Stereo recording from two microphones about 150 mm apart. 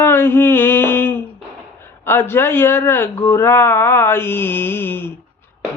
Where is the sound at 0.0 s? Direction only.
15° left (ahead or behind).